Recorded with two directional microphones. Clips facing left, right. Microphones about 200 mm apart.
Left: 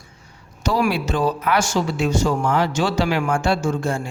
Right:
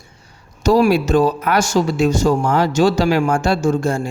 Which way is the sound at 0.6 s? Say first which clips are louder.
Right 7 dB; 40° right (ahead or behind).